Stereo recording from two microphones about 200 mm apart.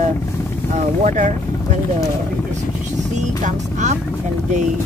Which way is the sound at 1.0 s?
35° right (ahead or behind).